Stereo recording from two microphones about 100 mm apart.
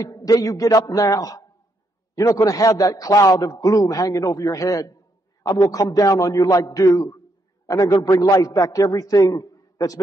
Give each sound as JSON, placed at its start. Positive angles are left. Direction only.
{"t": 0.0, "sound": "a man's voice", "side_deg": 35}